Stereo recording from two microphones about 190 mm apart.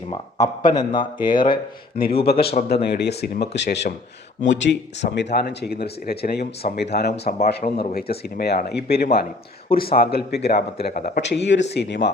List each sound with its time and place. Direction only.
0.1 s speech: 20° left (ahead or behind)
2.4 s speech: 55° left (ahead or behind)